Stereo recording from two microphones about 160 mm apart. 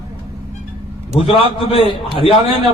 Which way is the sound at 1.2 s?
35° left (ahead or behind).